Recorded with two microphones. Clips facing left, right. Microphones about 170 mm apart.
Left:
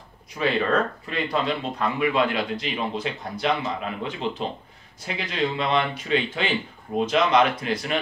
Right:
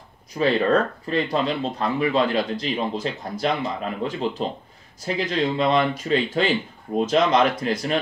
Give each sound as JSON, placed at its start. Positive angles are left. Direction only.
{"t": 0.4, "sound": "speech", "side_deg": -35}